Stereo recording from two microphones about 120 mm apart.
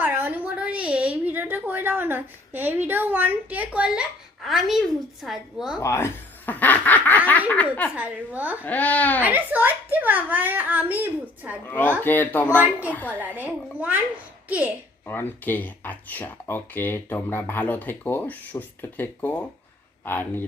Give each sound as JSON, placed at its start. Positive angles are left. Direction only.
{"t": 0.0, "sound": "a sound", "side_deg": -15}
{"t": 4.4, "sound": "a woman's voice", "side_deg": 0}
{"t": 5.8, "sound": "snicker", "side_deg": 20}
{"t": 7.3, "sound": "speech", "side_deg": 15}
{"t": 7.9, "sound": "a child's voice", "side_deg": -15}
{"t": 8.6, "sound": "speech", "side_deg": 10}
{"t": 9.2, "sound": "a child's voice", "side_deg": -15}
{"t": 11.6, "sound": "speech", "side_deg": 15}
{"t": 13.1, "sound": "a child's voice", "side_deg": -15}
{"t": 15.0, "sound": "speech", "side_deg": 15}